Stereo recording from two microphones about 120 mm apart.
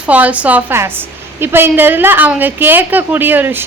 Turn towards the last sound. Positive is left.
turn(degrees=-15)  # may be behind; listen again after turning